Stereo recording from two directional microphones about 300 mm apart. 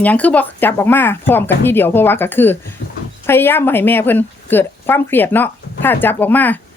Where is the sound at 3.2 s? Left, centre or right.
Centre.